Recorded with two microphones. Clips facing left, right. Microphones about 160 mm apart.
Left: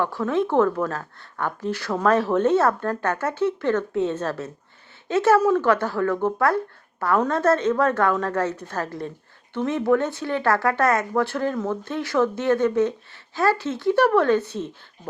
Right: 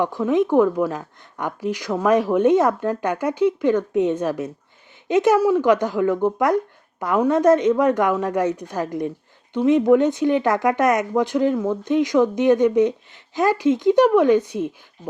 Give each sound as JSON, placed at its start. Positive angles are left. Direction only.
{"t": 0.0, "sound": "a woman's voice", "side_deg": -15}